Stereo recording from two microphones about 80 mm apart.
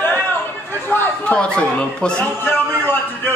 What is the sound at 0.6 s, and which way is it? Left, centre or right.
A man's voice, left.